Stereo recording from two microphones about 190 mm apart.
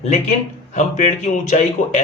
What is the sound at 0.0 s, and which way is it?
A man's voice, 40° left (ahead or behind).